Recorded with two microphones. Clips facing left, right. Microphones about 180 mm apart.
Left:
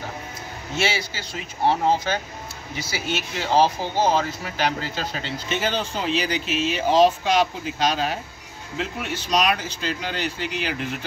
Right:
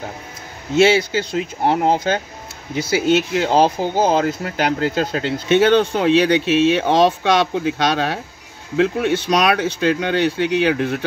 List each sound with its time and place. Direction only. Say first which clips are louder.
0.8 s speech: right 11 dB; 60° right (ahead or behind)